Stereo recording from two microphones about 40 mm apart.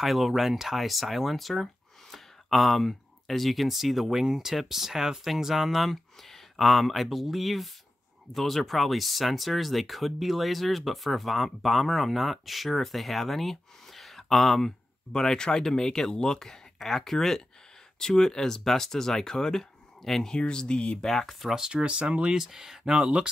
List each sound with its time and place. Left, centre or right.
0.0 s speech: centre
15.1 s speech: centre
16.3 s speech: centre
20.2 s speech: left
21.0 s speech: centre
21.5 s speech: centre
21.8 s speech: right
22.4 s speech: centre